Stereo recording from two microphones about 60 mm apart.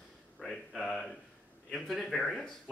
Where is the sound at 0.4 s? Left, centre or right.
Centre.